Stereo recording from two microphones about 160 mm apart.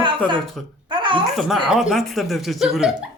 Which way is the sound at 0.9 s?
30° right (ahead or behind).